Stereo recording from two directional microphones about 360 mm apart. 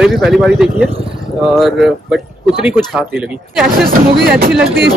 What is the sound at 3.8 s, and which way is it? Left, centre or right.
Speech, right.